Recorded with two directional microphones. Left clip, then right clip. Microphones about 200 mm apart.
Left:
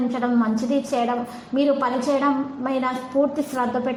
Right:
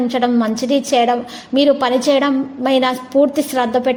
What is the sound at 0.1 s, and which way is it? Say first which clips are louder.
A woman's voice: right 6 dB; 35° right (ahead or behind).